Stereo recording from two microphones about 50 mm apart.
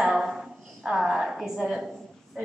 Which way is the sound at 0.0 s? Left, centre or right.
Centre.